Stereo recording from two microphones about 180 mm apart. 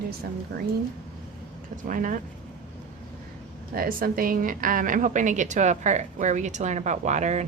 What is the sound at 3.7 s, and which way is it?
A woman's voice, 55° right (ahead or behind).